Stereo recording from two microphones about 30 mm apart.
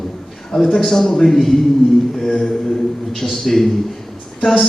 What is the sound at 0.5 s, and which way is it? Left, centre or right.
A man's voice, centre.